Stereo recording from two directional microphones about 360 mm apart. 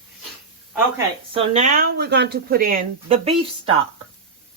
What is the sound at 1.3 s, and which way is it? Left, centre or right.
Speech, centre.